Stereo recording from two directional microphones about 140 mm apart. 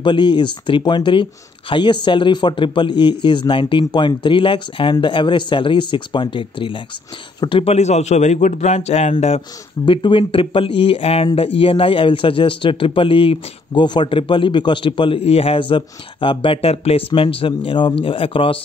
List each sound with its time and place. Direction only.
0.0 s a man's voice: 35° left (ahead or behind); by 9.4 s 50° left (ahead or behind)
9.8 s a man's voice: 35° left (ahead or behind)